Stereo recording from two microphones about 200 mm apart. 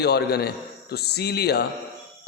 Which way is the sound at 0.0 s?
55° left (ahead or behind).